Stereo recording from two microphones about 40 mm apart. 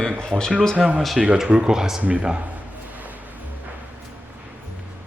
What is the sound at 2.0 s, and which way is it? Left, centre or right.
Speech, right.